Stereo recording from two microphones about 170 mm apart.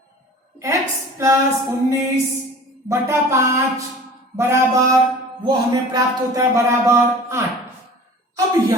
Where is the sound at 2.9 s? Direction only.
15° right (ahead or behind).